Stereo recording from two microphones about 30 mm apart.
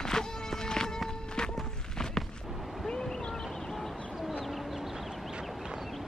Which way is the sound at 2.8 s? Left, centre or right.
Left.